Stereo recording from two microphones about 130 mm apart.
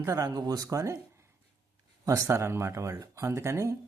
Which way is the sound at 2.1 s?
20° right (ahead or behind).